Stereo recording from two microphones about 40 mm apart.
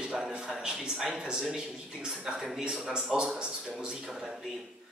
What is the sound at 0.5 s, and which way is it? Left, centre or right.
A man's voice, centre.